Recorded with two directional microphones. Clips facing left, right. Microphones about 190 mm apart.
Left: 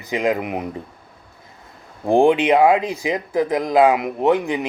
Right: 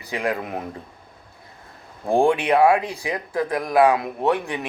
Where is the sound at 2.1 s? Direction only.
20° left (ahead or behind).